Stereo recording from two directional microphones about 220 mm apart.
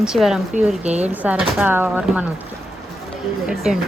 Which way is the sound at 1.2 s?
5° right (ahead or behind).